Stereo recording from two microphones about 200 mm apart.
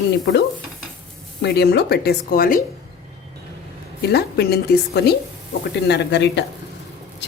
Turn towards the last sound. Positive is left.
turn(degrees=60)  # may be behind; listen again after turning